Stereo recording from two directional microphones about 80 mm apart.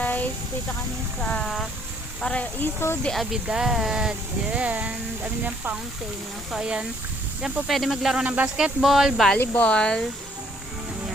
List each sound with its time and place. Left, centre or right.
0.0 s a sound: centre
1.2 s speech: centre
2.6 s speech: left
3.4 s speech: centre
4.5 s speech: centre
8.2 s speech: centre
9.6 s speech: centre